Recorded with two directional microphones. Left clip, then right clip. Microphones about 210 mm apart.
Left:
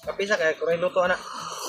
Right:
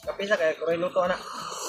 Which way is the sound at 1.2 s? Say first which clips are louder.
Left 1 dB; centre (ahead or behind).